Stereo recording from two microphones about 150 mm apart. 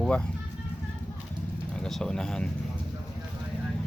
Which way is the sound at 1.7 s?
5° left (ahead or behind).